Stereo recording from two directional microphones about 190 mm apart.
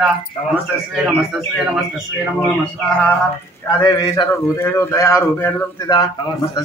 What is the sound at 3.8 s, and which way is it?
A man's voice, 15° left (ahead or behind).